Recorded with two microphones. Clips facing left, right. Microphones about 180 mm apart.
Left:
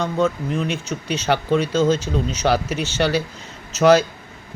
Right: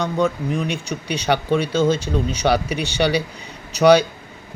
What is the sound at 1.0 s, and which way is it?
Speech, 65° right (ahead or behind).